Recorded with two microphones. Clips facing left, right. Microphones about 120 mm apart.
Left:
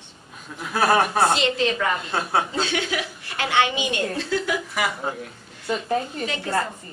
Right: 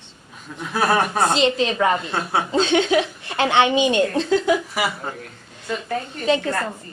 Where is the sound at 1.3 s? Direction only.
20° right (ahead or behind).